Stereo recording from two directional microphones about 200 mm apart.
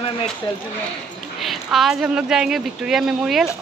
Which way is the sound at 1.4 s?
Centre (ahead or behind).